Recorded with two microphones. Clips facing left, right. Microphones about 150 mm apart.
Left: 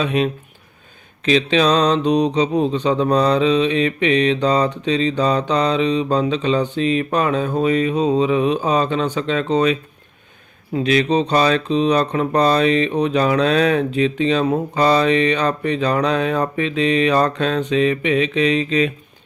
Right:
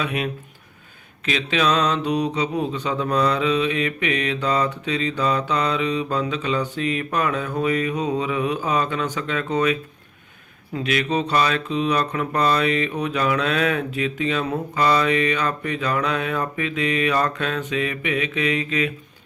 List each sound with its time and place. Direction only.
0.0 s speech: 30° left (ahead or behind)
10.8 s speech: 30° left (ahead or behind)